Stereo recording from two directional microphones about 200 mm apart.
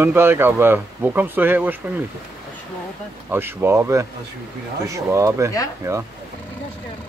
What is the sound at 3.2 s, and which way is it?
Speech, 10° right (ahead or behind).